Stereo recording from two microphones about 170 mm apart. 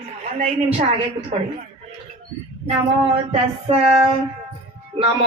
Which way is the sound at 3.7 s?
35° right (ahead or behind).